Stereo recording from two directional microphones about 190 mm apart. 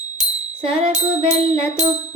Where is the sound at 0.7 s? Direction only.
30° right (ahead or behind).